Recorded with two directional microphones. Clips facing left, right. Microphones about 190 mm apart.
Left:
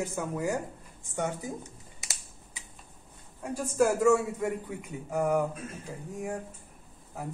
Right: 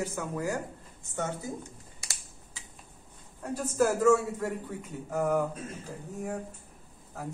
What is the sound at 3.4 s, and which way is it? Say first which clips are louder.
Speech: left 1 dB; 10° left (ahead or behind).